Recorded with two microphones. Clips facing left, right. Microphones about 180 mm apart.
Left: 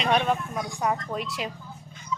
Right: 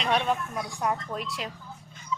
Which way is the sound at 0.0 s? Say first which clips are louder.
Left 2 dB; centre (ahead or behind).